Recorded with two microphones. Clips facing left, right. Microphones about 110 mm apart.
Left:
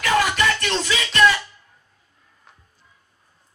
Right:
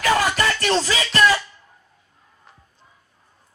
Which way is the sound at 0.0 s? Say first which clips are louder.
Even; 35° right (ahead or behind).